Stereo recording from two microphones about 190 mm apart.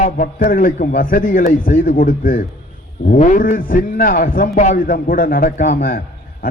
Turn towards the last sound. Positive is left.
turn(degrees=45)  # may be behind; listen again after turning